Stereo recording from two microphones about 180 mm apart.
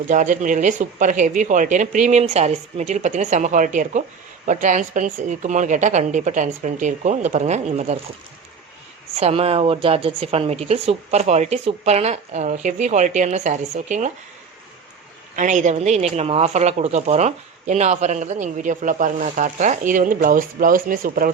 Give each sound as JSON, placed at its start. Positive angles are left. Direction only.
{"t": 0.1, "sound": "a woman's voice", "side_deg": -45}
{"t": 9.1, "sound": "speech", "side_deg": -35}
{"t": 15.4, "sound": "a woman's voice", "side_deg": -45}